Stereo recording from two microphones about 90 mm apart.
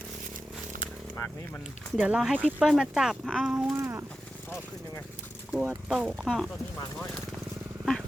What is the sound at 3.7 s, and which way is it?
Speech, 30° right (ahead or behind).